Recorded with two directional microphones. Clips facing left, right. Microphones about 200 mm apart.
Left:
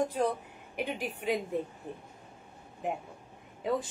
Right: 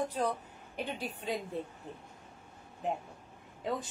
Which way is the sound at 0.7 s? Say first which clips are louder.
Left 3 dB; 10° left (ahead or behind).